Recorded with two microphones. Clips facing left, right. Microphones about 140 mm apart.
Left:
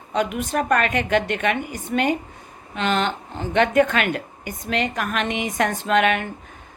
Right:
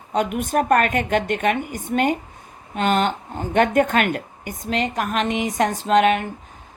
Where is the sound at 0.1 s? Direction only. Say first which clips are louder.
Right 2 dB; 45° right (ahead or behind).